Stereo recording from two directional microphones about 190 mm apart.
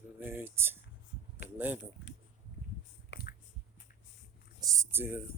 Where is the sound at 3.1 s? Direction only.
55° left (ahead or behind).